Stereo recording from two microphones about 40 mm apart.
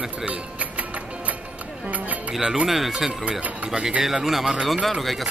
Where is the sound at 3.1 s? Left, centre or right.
Right.